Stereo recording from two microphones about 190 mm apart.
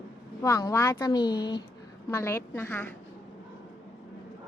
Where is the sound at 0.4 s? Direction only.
15° left (ahead or behind).